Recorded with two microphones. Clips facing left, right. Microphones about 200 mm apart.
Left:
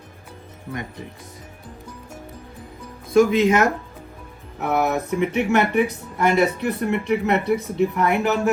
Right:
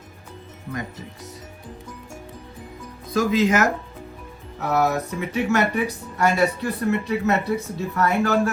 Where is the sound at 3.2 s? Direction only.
30° left (ahead or behind).